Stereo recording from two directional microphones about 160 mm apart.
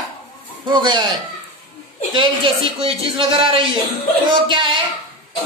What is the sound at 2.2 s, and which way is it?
Speech, 35° right (ahead or behind).